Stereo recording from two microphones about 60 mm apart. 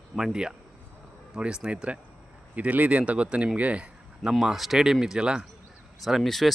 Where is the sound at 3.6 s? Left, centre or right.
Right.